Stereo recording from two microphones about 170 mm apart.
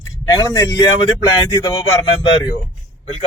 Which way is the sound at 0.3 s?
20° left (ahead or behind).